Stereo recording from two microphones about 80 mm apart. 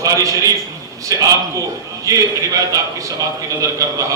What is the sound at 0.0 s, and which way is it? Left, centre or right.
A man's voice, right.